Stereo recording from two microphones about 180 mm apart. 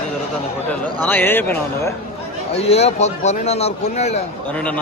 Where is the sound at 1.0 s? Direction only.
10° left (ahead or behind).